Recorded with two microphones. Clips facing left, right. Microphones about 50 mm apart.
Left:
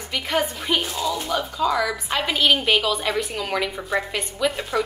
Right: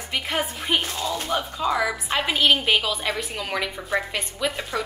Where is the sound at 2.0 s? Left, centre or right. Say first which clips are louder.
Even; centre.